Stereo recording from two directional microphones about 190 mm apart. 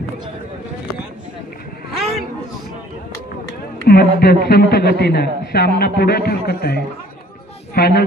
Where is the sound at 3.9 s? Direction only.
50° left (ahead or behind).